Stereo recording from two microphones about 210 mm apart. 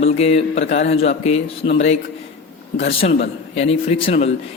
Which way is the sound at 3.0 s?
35° left (ahead or behind).